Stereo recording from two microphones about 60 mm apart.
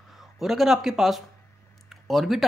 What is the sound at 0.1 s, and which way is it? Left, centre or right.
Speech, centre.